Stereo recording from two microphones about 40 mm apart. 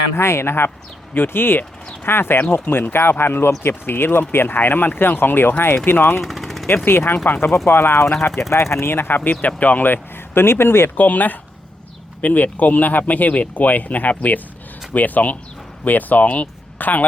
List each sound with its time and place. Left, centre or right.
0.2 s speech: left
1.1 s speech: left
2.0 s speech: left
6.2 s vehicle: centre
6.8 s speech: left
9.4 s speech: left
10.9 s speech: left